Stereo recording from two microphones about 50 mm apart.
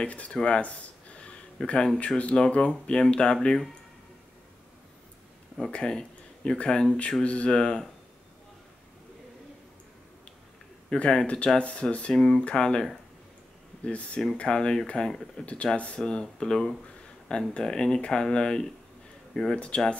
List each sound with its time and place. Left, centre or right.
0.0 s speech: left
0.4 s a sound: left
1.6 s speech: centre
2.0 s speech: left
5.7 s speech: centre
10.9 s speech: centre
13.8 s speech: left
15.4 s speech: left